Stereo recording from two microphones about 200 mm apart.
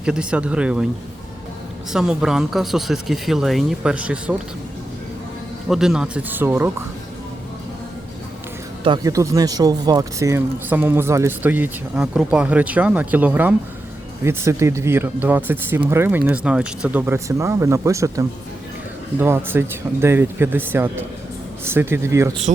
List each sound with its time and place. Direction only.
0.0 s speech: 5° right (ahead or behind)
1.9 s speech: 5° right (ahead or behind)
5.6 s speech: centre (ahead or behind)
8.8 s speech: 20° right (ahead or behind)
22.5 s speech: 40° right (ahead or behind)